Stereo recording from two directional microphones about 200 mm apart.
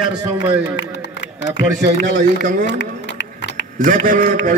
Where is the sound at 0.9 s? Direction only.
60° left (ahead or behind).